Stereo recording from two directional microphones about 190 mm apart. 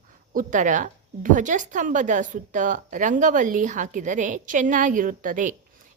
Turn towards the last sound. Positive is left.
turn(degrees=-45)  # may be behind; listen again after turning